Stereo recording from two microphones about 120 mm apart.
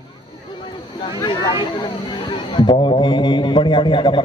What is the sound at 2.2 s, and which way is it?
A man's voice, 40° left (ahead or behind).